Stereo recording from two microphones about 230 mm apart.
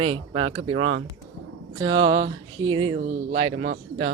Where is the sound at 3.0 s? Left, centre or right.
Right.